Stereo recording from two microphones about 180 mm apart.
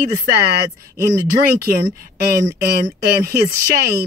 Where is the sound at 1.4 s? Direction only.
55° right (ahead or behind).